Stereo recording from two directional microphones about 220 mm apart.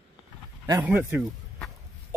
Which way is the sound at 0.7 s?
10° right (ahead or behind).